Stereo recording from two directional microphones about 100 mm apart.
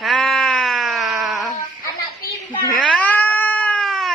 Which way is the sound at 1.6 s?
30° left (ahead or behind).